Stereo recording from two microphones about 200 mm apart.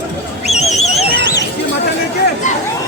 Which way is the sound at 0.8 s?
35° left (ahead or behind).